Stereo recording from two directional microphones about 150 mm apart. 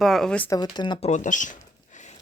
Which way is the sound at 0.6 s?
30° left (ahead or behind).